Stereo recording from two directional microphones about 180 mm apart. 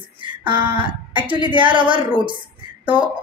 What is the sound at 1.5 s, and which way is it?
Speech, 25° right (ahead or behind).